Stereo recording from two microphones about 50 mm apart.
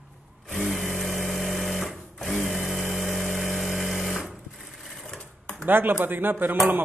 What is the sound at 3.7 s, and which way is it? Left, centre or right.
Sewing machine, centre.